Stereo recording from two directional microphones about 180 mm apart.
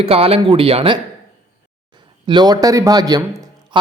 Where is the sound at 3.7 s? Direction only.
25° right (ahead or behind).